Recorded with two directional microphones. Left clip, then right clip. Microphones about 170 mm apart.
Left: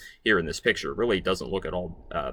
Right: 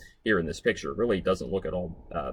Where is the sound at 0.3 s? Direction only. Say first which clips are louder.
Left 3 dB; 15° left (ahead or behind).